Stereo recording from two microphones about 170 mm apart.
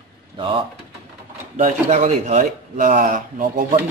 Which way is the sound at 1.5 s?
45° right (ahead or behind).